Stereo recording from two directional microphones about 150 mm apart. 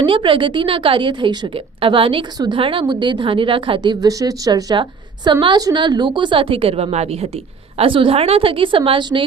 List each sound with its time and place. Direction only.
0.0 s a woman's voice: 35° right (ahead or behind)